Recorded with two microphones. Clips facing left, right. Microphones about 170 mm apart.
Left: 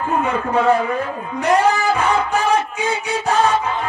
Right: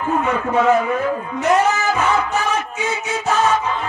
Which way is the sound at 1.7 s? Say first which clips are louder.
Left 1 dB; 35° left (ahead or behind).